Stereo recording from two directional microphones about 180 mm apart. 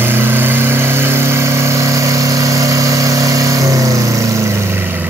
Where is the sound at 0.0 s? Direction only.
10° right (ahead or behind).